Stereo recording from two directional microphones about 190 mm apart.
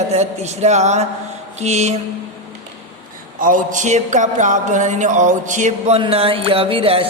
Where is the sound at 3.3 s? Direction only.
45° right (ahead or behind).